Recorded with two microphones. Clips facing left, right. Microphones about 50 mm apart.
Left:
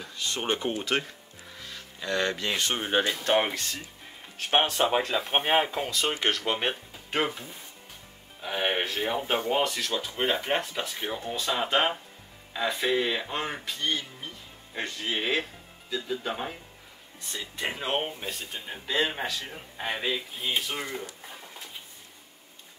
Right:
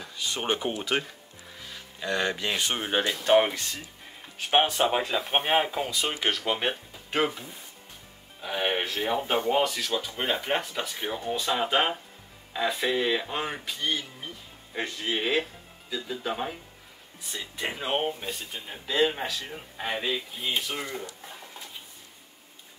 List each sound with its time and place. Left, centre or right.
0.0 s speech: centre